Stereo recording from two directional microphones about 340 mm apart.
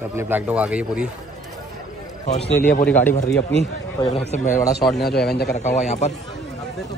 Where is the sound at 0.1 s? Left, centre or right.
Centre.